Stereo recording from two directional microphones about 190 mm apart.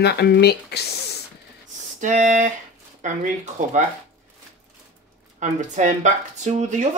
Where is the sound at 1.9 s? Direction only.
40° right (ahead or behind).